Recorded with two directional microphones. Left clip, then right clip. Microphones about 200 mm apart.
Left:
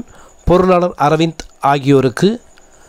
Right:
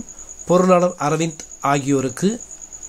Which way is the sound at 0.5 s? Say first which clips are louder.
Left 3 dB; 40° left (ahead or behind).